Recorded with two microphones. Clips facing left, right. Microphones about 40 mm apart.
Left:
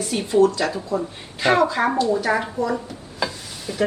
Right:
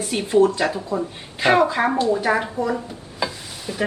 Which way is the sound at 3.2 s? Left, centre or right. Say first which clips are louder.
Even; centre.